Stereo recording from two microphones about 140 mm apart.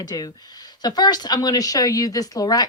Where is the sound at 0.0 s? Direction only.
25° left (ahead or behind).